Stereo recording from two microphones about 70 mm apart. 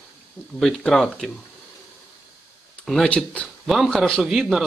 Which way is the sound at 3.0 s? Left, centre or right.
Centre.